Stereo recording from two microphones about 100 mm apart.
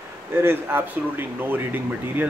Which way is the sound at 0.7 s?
20° right (ahead or behind).